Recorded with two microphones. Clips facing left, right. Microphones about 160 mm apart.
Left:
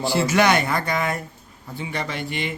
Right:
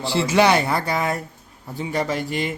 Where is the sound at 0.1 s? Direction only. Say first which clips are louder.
Right 2 dB; 30° right (ahead or behind).